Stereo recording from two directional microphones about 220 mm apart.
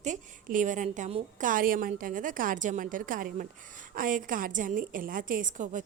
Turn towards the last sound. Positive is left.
turn(degrees=-35)  # may be behind; listen again after turning